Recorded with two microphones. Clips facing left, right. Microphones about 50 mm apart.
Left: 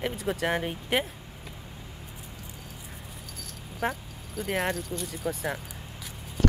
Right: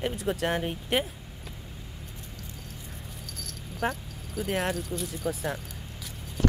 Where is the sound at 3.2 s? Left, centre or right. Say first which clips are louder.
Right 1 dB; centre.